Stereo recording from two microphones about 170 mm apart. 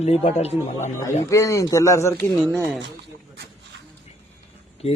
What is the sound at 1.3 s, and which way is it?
Speech, 20° left (ahead or behind).